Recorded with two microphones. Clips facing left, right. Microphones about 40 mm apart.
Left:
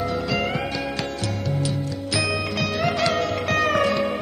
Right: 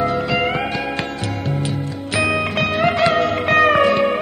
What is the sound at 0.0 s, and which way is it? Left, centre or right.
Music, right.